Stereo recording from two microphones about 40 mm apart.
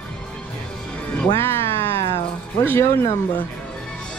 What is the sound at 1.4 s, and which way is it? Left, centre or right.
Music, left.